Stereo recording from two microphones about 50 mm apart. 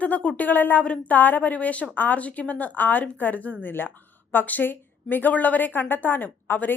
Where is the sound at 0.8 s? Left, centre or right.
Left.